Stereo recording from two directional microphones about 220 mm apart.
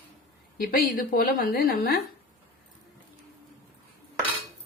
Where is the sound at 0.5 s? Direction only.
40° left (ahead or behind).